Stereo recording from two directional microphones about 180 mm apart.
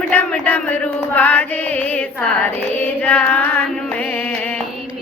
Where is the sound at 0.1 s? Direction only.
10° left (ahead or behind).